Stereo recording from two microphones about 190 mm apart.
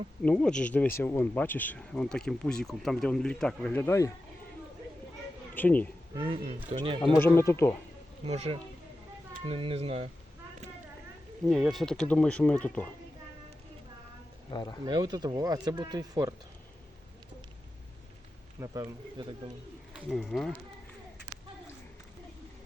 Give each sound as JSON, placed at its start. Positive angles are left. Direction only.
{"t": 0.2, "sound": "speech", "side_deg": 5}
{"t": 5.5, "sound": "speech", "side_deg": 10}
{"t": 6.1, "sound": "speech", "side_deg": -30}
{"t": 7.2, "sound": "speech", "side_deg": 15}
{"t": 8.2, "sound": "speech", "side_deg": -30}
{"t": 11.4, "sound": "speech", "side_deg": 0}
{"t": 14.5, "sound": "speech", "side_deg": 20}
{"t": 14.8, "sound": "speech", "side_deg": -20}
{"t": 18.6, "sound": "speech", "side_deg": -15}
{"t": 19.9, "sound": "speech", "side_deg": 0}